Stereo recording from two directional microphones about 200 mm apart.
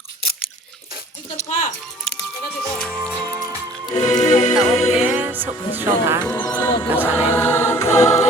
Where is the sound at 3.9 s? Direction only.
35° left (ahead or behind).